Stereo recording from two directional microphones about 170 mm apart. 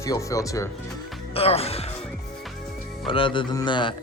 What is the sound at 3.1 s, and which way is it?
Music, 30° left (ahead or behind).